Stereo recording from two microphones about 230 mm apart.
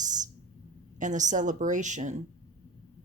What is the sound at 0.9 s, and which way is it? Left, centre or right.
A woman's voice, right.